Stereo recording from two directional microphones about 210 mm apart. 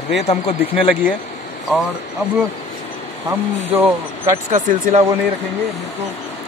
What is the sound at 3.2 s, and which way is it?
Speech, 10° right (ahead or behind).